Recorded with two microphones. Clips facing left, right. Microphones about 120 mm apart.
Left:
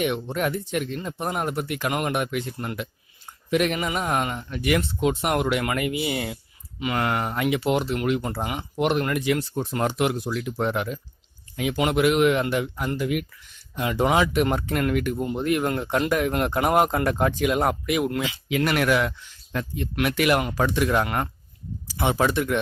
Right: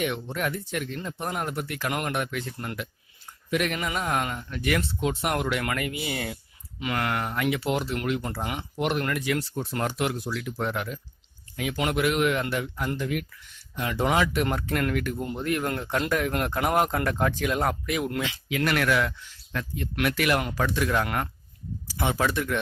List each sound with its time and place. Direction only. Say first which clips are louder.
0.0 s speech: left 4 dB; 20° left (ahead or behind)
6.3 s a sound: left 2 dB; 10° left (ahead or behind)
7.0 s a man's voice: left 3 dB; 20° left (ahead or behind)